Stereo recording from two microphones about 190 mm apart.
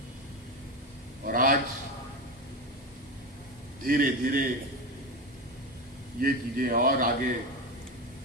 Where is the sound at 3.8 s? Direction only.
45° right (ahead or behind).